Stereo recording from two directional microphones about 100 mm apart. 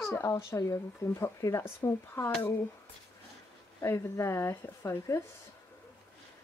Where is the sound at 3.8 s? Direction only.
30° left (ahead or behind).